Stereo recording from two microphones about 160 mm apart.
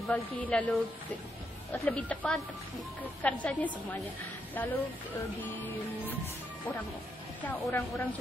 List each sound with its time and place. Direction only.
0.1 s a woman's voice: 10° left (ahead or behind)
7.4 s speech: 5° left (ahead or behind)